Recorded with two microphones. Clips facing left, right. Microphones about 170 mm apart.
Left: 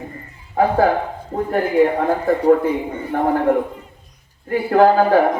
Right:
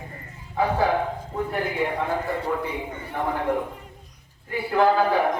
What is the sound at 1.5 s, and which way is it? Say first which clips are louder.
Speech: left 12 dB; 50° left (ahead or behind).